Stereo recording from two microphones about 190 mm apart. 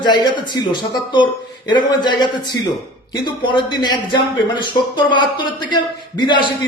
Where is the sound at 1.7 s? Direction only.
25° left (ahead or behind).